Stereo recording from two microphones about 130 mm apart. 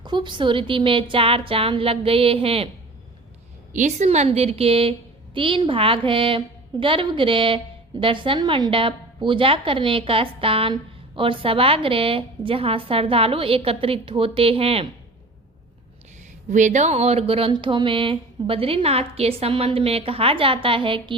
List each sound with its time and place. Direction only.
0.0 s a woman's voice: 35° right (ahead or behind)
3.7 s a woman's voice: 70° right (ahead or behind); by 14.8 s 45° right (ahead or behind)
16.5 s a woman's voice: 70° right (ahead or behind); by 21.2 s 40° right (ahead or behind)